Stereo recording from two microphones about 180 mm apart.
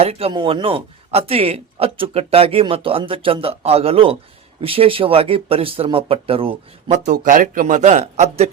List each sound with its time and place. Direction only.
0.0 s speech: 35° right (ahead or behind)
7.1 s a man's voice: 45° right (ahead or behind)